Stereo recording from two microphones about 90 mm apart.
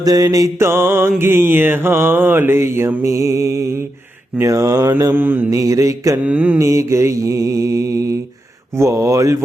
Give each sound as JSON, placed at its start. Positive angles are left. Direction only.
{"t": 0.0, "sound": "mantra", "side_deg": -45}
{"t": 5.1, "sound": "mantra", "side_deg": -20}
{"t": 5.5, "sound": "mantra", "side_deg": -40}
{"t": 6.2, "sound": "mantra", "side_deg": -15}
{"t": 6.6, "sound": "mantra", "side_deg": -35}